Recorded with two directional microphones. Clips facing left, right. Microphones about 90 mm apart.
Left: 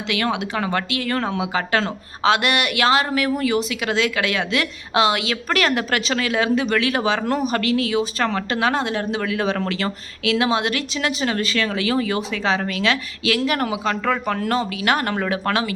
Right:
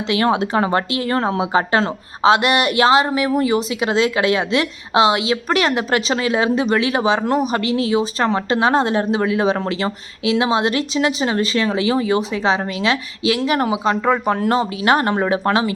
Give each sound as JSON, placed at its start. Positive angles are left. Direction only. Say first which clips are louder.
{"t": 0.1, "sound": "speech", "louder": "right 6 dB", "side_deg": -35}